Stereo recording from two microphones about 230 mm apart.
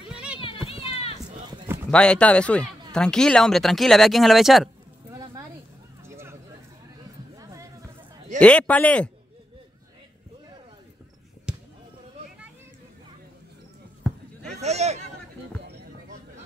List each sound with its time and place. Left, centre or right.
0.1 s run: centre
0.4 s run: left
1.9 s speech: centre
5.1 s a sound: centre
7.3 s a sound: centre
8.4 s speech: centre
11.5 s basketball bounce: centre
14.0 s basketball bounce: centre
14.5 s speech: right